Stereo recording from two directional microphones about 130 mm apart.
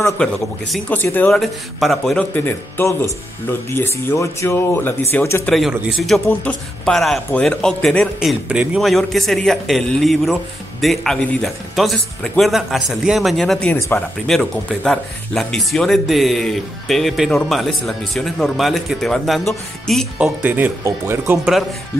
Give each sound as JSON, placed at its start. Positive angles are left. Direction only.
{"t": 0.2, "sound": "speech", "side_deg": 10}
{"t": 1.3, "sound": "speech", "side_deg": 0}
{"t": 2.3, "sound": "speech", "side_deg": 15}
{"t": 5.5, "sound": "speech", "side_deg": 0}
{"t": 20.2, "sound": "speech", "side_deg": -10}